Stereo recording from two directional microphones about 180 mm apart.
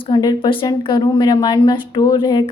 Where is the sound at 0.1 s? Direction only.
25° left (ahead or behind).